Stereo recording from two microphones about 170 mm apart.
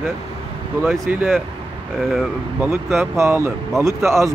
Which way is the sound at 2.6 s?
15° right (ahead or behind).